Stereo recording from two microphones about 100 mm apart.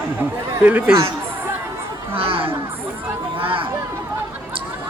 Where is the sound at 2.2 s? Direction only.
65° right (ahead or behind).